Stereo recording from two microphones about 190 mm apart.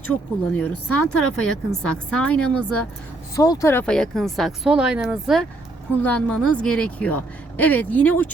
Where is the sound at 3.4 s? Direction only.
15° left (ahead or behind).